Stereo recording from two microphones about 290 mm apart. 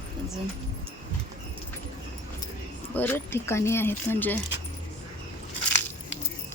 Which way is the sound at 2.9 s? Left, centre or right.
Centre.